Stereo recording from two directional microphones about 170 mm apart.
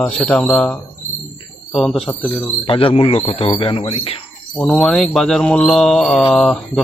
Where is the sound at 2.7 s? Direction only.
30° left (ahead or behind).